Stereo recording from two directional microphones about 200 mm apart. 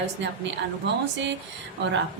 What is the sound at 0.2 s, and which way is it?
A woman's voice, 60° right (ahead or behind).